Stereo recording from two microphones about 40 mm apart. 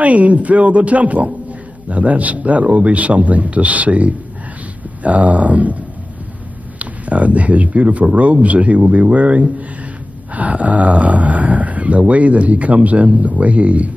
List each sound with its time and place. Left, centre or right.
0.0 s speech: right
6.8 s speech: right